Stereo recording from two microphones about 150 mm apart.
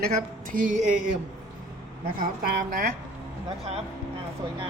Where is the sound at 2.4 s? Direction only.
90° right.